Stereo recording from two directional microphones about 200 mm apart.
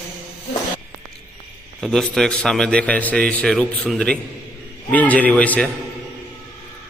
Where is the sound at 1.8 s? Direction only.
Centre (ahead or behind).